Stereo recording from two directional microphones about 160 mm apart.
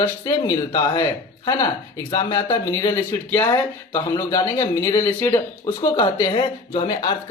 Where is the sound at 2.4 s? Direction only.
20° left (ahead or behind).